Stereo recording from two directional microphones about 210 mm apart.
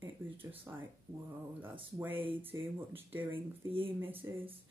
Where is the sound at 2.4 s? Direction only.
10° right (ahead or behind).